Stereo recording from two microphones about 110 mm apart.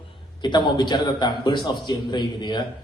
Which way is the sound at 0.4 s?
45° left (ahead or behind).